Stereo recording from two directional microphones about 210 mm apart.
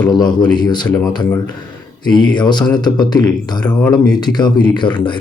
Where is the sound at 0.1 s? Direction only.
20° left (ahead or behind).